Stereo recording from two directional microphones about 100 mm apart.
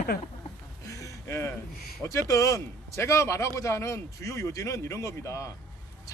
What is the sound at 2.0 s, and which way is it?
Speech, 30° left (ahead or behind).